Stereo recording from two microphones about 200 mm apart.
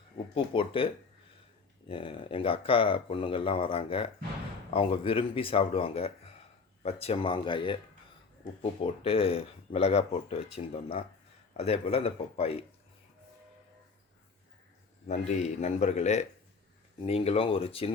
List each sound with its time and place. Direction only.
0.3 s speech: 25° left (ahead or behind)
1.9 s speech: 25° left (ahead or behind)
8.8 s speech: 30° left (ahead or behind)
15.0 s a man's voice: 35° left (ahead or behind)